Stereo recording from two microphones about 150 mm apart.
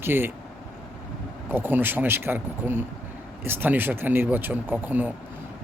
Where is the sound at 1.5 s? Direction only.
15° right (ahead or behind).